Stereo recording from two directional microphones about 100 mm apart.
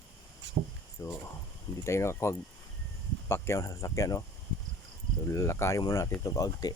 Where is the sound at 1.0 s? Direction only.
35° left (ahead or behind).